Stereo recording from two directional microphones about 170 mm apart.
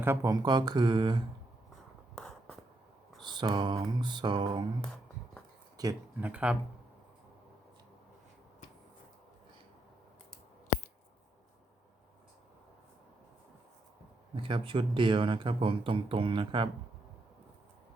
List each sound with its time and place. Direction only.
0.0 s mantra: 15° right (ahead or behind)
2.1 s writing: centre (ahead or behind)
3.2 s mantra: 25° right (ahead or behind)
4.8 s a sound: 5° left (ahead or behind)
5.7 s a sound: 20° right (ahead or behind)
6.1 s speech: 10° right (ahead or behind)
14.3 s speech: 30° right (ahead or behind)